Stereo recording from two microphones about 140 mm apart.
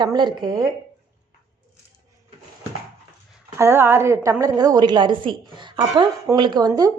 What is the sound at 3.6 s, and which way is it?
A woman's voice, 15° right (ahead or behind).